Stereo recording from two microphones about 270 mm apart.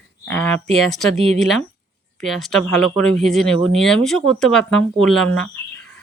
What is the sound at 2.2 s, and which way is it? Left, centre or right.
Speech, centre.